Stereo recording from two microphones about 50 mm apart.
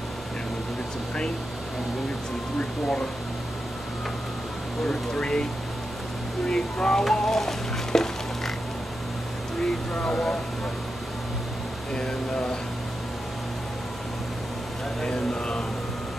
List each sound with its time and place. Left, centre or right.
5.1 s speech: centre
9.6 s speech: centre
11.9 s speech: centre
15.0 s speech: centre